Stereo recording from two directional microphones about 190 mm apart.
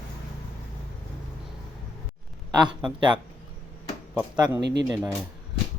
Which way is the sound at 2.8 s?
25° right (ahead or behind).